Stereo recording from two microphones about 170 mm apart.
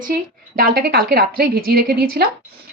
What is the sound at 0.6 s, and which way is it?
Speech, 70° right (ahead or behind).